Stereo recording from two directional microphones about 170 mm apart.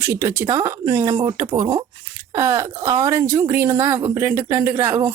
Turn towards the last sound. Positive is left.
turn(degrees=-15)  # may be behind; listen again after turning